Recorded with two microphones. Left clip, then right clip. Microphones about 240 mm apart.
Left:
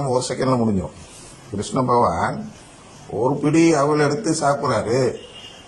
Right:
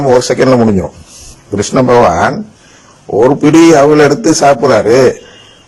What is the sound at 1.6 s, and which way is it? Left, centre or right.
A man's voice, right.